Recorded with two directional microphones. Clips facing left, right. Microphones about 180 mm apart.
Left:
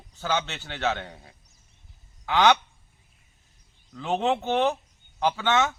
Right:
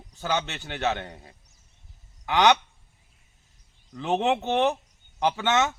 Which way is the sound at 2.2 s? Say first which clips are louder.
Even; 15° right (ahead or behind).